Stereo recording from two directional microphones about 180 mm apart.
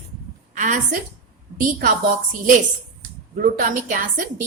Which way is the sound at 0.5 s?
45° right (ahead or behind).